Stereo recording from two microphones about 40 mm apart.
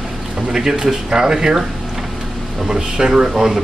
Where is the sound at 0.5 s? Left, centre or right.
Centre.